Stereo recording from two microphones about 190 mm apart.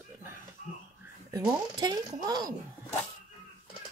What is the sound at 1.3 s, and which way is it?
Speech, 20° right (ahead or behind).